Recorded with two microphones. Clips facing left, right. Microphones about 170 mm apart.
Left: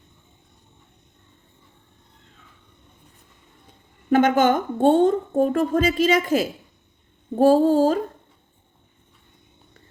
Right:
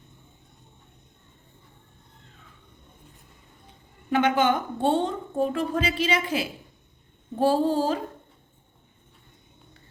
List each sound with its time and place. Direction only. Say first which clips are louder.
4.1 s a woman's voice: left 5 dB; 45° left (ahead or behind)